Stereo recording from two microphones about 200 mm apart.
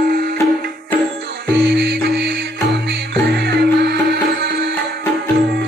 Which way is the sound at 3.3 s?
55° right (ahead or behind).